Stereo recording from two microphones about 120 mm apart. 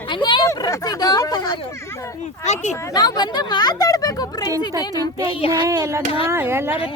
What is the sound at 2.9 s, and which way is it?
Speech, 35° left (ahead or behind).